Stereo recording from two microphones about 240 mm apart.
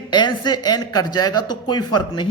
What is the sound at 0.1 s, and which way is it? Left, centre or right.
A man's voice, centre.